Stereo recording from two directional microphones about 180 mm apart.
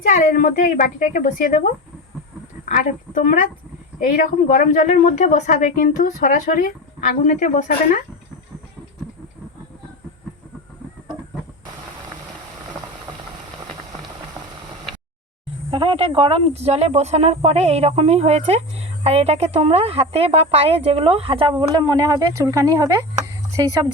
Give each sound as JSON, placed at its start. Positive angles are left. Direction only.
{"t": 0.0, "sound": "speech", "side_deg": 45}
{"t": 3.2, "sound": "speech", "side_deg": 50}
{"t": 15.7, "sound": "speech", "side_deg": -30}